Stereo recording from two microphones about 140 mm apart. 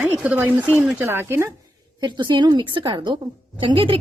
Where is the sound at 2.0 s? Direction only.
35° right (ahead or behind).